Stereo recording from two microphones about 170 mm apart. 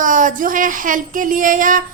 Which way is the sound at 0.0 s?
50° right (ahead or behind).